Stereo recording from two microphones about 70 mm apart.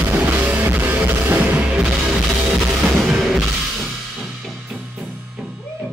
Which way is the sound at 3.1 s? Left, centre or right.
Centre.